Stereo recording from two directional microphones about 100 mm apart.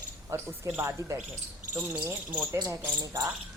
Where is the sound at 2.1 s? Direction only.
25° right (ahead or behind).